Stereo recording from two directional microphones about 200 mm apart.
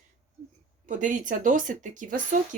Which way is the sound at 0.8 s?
40° right (ahead or behind).